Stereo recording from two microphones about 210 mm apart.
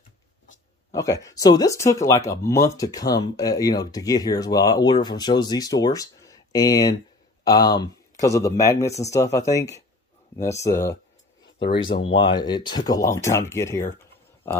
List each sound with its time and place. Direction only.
0.9 s speech: 15° left (ahead or behind)